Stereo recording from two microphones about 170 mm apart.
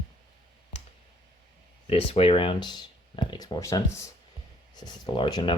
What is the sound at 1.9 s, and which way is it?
Speech, 35° left (ahead or behind).